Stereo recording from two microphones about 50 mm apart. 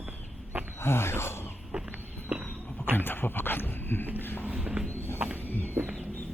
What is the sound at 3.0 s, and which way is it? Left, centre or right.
Speech, left.